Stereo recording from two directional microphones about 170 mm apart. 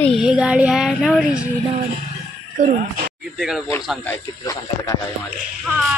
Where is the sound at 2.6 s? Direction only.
50° right (ahead or behind).